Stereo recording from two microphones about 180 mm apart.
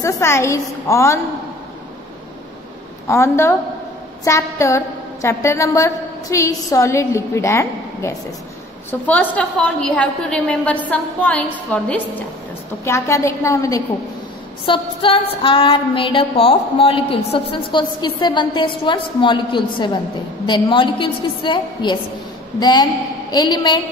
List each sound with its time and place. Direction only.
0.0 s a woman's voice: 15° left (ahead or behind)
3.1 s a woman's voice: 15° left (ahead or behind)
14.7 s a sound: 30° left (ahead or behind)